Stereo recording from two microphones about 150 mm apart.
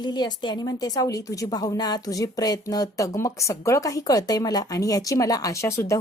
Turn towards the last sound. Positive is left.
turn(degrees=20)  # may be behind; listen again after turning